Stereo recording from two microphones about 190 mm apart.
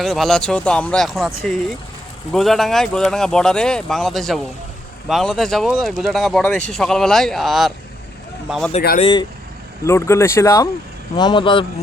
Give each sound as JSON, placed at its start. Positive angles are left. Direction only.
{"t": 0.0, "sound": "speech", "side_deg": 0}
{"t": 2.3, "sound": "speech", "side_deg": 0}
{"t": 9.0, "sound": "a man's voice", "side_deg": 25}
{"t": 9.8, "sound": "a man's voice", "side_deg": 15}